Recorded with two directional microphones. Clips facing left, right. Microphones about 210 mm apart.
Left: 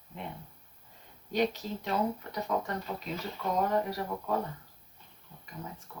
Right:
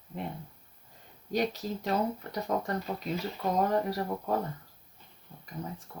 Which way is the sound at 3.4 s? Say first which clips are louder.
Right 1 dB; 40° right (ahead or behind).